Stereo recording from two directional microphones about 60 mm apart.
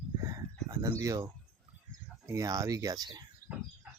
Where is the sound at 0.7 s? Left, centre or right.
Right.